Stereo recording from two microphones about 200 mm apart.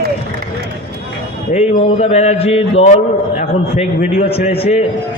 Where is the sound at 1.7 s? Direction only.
35° left (ahead or behind).